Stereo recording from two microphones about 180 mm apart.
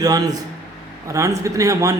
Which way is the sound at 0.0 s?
20° right (ahead or behind).